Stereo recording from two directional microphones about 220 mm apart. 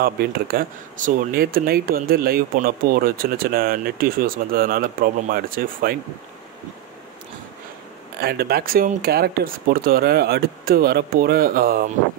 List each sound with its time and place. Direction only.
0.0 s speech: 40° right (ahead or behind)
8.2 s speech: 45° right (ahead or behind)